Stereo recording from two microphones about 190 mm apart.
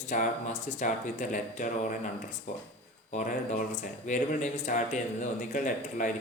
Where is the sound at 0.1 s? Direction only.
40° left (ahead or behind).